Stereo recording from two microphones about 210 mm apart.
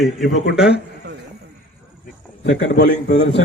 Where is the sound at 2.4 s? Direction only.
55° left (ahead or behind).